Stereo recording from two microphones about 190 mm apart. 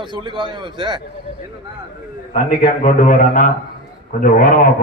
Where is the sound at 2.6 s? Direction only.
40° left (ahead or behind).